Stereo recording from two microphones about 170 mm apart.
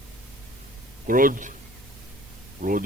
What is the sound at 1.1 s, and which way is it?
Speech, 55° right (ahead or behind).